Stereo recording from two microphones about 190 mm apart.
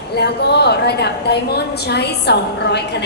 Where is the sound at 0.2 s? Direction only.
60° left (ahead or behind).